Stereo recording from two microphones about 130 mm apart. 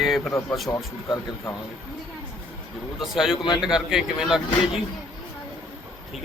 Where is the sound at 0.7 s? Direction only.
25° left (ahead or behind).